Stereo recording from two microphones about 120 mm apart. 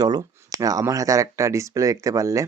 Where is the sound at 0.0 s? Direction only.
35° right (ahead or behind).